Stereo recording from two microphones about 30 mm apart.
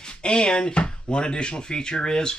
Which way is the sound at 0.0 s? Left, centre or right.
Left.